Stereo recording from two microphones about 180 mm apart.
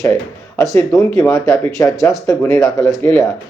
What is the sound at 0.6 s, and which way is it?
Speech, 15° left (ahead or behind).